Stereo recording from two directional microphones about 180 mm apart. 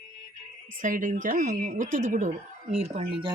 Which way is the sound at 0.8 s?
45° right (ahead or behind).